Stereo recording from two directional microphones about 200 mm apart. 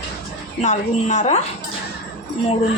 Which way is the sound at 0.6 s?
35° left (ahead or behind).